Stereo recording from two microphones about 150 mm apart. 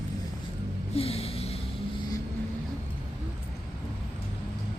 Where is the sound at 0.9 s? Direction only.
40° left (ahead or behind).